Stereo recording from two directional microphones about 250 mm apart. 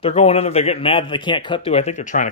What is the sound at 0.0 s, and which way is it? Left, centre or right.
Speech, left.